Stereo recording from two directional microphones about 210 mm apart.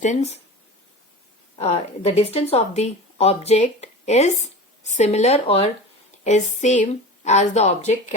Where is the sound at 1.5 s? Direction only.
30° left (ahead or behind).